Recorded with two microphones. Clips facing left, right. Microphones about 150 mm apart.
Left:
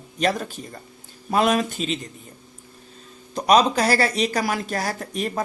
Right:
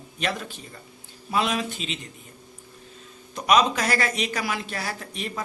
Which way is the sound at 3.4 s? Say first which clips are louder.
Left 3 dB; 35° left (ahead or behind).